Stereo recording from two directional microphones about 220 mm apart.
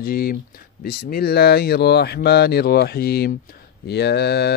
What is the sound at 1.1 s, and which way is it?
Mantra, 45° left (ahead or behind).